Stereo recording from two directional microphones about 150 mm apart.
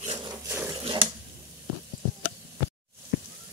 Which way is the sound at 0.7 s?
35° right (ahead or behind).